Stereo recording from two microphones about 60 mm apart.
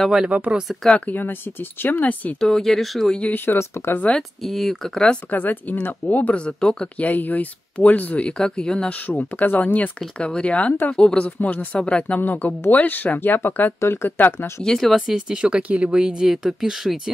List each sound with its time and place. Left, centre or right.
0.3 s speech: centre
0.8 s speech: centre
1.1 s speech: left
2.4 s speech: centre
3.3 s speech: left
4.4 s speech: centre
5.3 s speech: left
7.0 s speech: left
8.3 s speech: centre
9.0 s speech: left
9.9 s speech: centre; by 14.5 s left
14.6 s speech: centre
15.0 s speech: centre